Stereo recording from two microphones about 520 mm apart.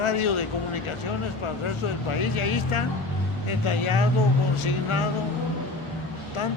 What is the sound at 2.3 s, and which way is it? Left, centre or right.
Speech, left.